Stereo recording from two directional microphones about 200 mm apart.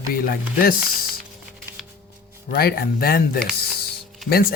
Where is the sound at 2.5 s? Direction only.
50° left (ahead or behind).